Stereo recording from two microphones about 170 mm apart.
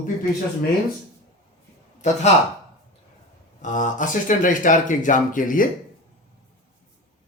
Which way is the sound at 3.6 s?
50° left (ahead or behind).